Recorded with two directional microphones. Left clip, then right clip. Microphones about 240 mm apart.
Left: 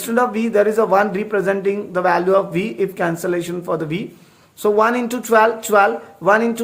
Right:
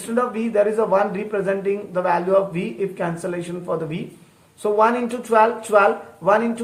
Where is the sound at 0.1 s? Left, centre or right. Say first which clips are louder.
Left 4 dB; left.